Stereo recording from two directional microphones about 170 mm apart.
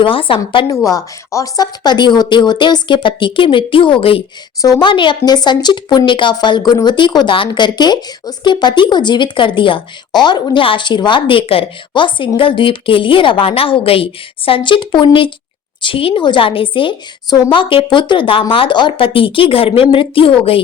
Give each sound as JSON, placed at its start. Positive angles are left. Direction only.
{"t": 0.0, "sound": "a woman's voice", "side_deg": 30}
{"t": 0.9, "sound": "a woman's voice", "side_deg": 20}